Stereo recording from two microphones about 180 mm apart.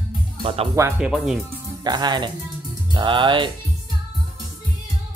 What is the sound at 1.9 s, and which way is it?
Speech, 25° right (ahead or behind).